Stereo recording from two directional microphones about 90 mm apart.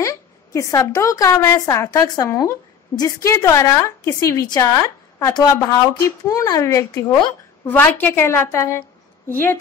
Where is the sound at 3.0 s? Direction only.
40° left (ahead or behind).